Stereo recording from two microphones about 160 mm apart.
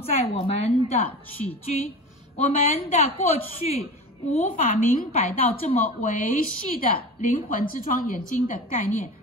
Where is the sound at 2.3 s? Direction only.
50° left (ahead or behind).